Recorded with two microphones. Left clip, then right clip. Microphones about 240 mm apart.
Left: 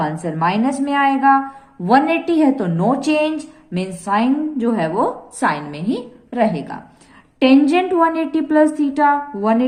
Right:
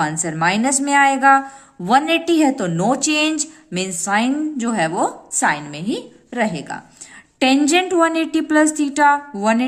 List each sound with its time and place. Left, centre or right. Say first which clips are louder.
0.0 s a woman's voice: even; right